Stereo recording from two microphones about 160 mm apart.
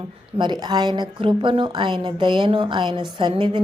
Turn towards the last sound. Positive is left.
turn(degrees=-30)  # may be behind; listen again after turning